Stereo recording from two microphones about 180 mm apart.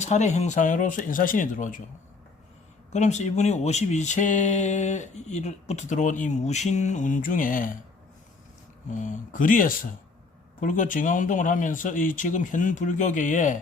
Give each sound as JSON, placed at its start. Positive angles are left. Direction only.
{"t": 0.0, "sound": "speech", "side_deg": 40}
{"t": 2.9, "sound": "speech", "side_deg": 40}
{"t": 8.9, "sound": "speech", "side_deg": 45}